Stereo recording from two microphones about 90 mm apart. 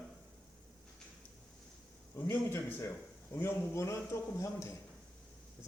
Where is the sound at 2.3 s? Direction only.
25° left (ahead or behind).